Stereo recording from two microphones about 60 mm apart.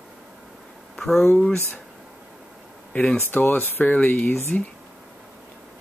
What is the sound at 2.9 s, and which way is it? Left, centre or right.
Speech, centre.